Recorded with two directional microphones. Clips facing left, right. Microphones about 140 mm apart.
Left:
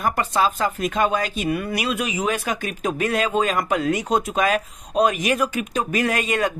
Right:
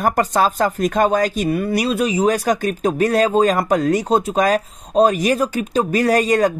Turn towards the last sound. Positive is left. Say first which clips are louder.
# right 6 dB
turn(degrees=-35)  # may be behind; listen again after turning